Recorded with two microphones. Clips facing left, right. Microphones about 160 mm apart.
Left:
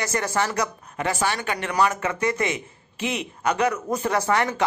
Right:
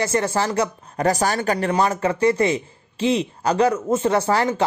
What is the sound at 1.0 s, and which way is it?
A man's voice, 40° right (ahead or behind).